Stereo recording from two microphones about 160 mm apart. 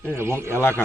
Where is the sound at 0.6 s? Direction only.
15° left (ahead or behind).